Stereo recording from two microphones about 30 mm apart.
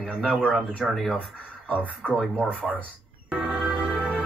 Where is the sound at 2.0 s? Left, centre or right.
Left.